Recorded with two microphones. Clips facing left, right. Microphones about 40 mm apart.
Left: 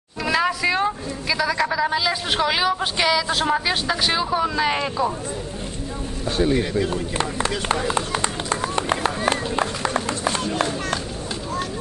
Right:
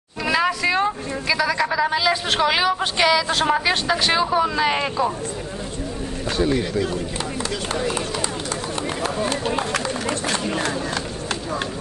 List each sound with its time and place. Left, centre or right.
0.2 s a sound: centre
0.7 s a woman's voice: centre
6.3 s a man's voice: centre
6.9 s speech: left
8.1 s run: left
10.3 s speech: right